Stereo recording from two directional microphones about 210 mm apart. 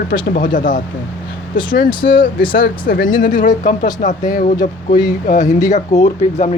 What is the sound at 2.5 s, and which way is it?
Speech, 45° left (ahead or behind).